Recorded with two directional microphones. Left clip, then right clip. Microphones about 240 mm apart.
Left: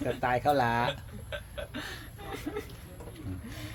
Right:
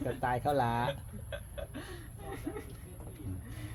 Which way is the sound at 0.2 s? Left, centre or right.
Centre.